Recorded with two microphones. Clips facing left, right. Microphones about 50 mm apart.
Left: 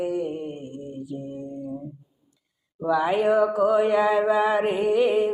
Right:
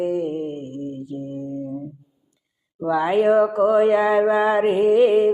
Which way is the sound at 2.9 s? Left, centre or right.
Right.